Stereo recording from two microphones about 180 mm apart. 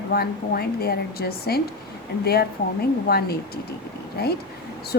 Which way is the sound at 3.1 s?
60° left (ahead or behind).